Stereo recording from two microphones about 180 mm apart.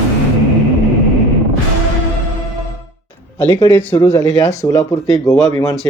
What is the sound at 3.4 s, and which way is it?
Speech, 15° left (ahead or behind).